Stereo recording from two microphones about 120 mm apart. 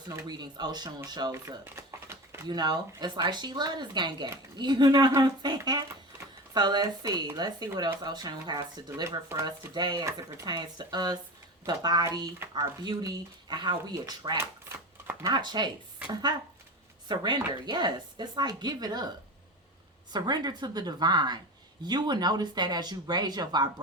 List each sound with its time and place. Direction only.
0.3 s speech: 35° right (ahead or behind)
1.6 s a sound: 20° right (ahead or behind)
2.5 s speech: 35° right (ahead or behind)
9.0 s speech: 25° right (ahead or behind)
9.7 s speech: 35° right (ahead or behind)
14.3 s typewriter: 20° right (ahead or behind)
15.3 s speech: 35° right (ahead or behind)
17.1 s speech: 40° right (ahead or behind)
20.1 s speech: 35° right (ahead or behind)